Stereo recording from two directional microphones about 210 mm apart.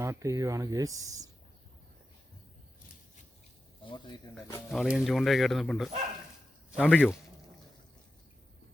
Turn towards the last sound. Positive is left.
turn(degrees=-5)  # may be behind; listen again after turning